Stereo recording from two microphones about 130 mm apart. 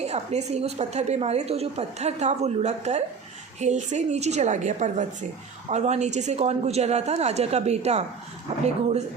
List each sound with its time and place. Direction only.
0.0 s a woman's voice: 55° right (ahead or behind)